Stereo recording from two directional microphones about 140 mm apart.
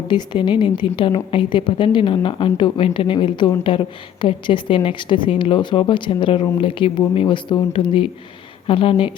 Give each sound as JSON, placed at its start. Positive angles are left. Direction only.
{"t": 0.1, "sound": "a woman's voice", "side_deg": 35}